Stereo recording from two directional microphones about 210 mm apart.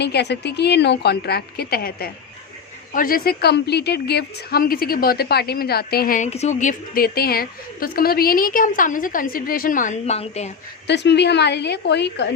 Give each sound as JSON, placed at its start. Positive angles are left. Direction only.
{"t": 0.0, "sound": "a woman's voice", "side_deg": 50}
{"t": 10.8, "sound": "a woman's voice", "side_deg": 55}